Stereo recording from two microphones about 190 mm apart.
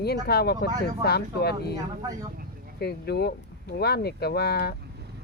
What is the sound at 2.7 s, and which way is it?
Speech, 55° left (ahead or behind).